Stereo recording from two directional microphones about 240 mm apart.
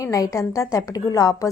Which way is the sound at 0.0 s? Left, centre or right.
Centre.